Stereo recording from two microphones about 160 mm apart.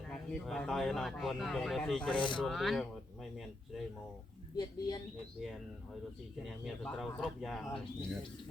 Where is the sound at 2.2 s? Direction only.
30° left (ahead or behind).